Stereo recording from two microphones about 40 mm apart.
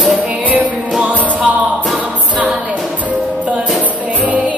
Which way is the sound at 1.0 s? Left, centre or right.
Right.